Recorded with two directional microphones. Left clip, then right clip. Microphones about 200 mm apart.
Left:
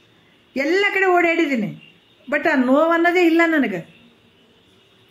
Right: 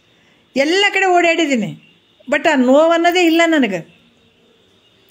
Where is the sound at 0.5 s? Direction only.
40° right (ahead or behind).